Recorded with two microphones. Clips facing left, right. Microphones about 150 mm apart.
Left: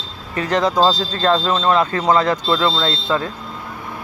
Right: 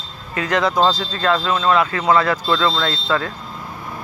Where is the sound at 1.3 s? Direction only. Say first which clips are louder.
Left 1 dB; 25° left (ahead or behind).